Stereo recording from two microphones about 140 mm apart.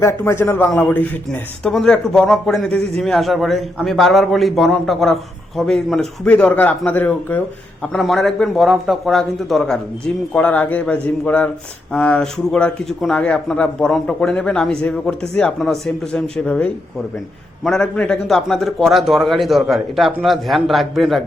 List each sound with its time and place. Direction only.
0.0 s a man's voice: 20° left (ahead or behind); by 21.2 s centre (ahead or behind)